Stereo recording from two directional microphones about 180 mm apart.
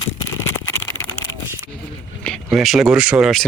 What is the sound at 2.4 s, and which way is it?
Speech, centre (ahead or behind).